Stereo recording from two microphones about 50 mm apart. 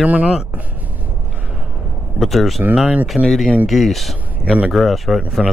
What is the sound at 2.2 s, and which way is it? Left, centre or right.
Speech, centre.